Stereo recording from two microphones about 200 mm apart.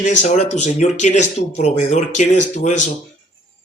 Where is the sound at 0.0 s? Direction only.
35° left (ahead or behind).